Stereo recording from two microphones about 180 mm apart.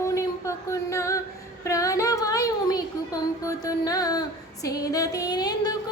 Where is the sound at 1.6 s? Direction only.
20° left (ahead or behind).